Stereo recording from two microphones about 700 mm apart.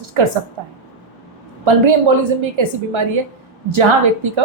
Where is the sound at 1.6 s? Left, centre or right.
Right.